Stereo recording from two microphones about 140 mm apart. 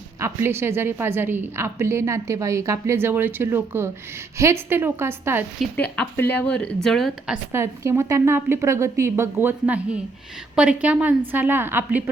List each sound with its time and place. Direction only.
0.2 s a woman's voice: 20° right (ahead or behind)
5.7 s speech: 10° left (ahead or behind)
7.5 s a woman's voice: 20° right (ahead or behind)